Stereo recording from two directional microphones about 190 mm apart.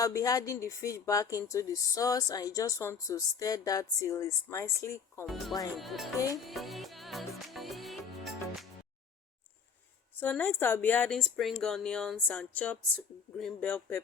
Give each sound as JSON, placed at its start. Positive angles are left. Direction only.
{"t": 0.0, "sound": "speech", "side_deg": 15}
{"t": 5.2, "sound": "music", "side_deg": 0}
{"t": 10.2, "sound": "speech", "side_deg": 10}